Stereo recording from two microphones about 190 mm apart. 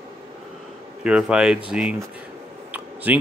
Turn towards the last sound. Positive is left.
turn(degrees=-10)  # may be behind; listen again after turning